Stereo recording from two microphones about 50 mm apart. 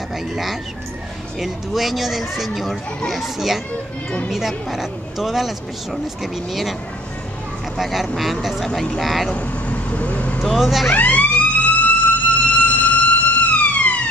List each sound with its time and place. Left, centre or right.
1.4 s speech: centre
7.7 s speech: centre
8.6 s speech: centre
9.3 s vehicle: left
10.6 s speech: centre
10.9 s emergency vehicle: left